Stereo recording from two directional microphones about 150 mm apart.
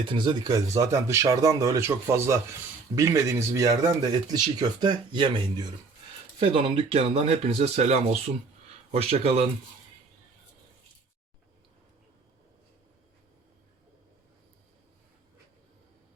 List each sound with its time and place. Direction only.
0.0 s speech: 30° right (ahead or behind)